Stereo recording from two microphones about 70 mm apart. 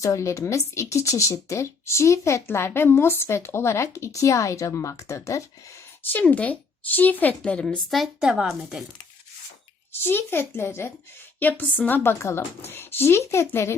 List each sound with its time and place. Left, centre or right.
0.0 s speech: left
6.0 s a woman's voice: left
7.9 s speech: centre
8.2 s speech: centre
9.9 s speech: left
11.3 s a woman's voice: left